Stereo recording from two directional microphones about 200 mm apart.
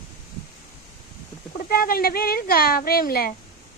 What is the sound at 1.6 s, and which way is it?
A woman's voice, 50° left (ahead or behind).